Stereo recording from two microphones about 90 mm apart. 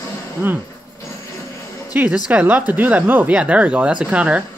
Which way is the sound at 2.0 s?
15° right (ahead or behind).